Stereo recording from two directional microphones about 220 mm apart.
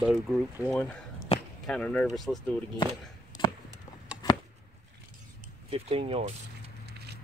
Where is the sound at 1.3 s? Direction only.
25° left (ahead or behind).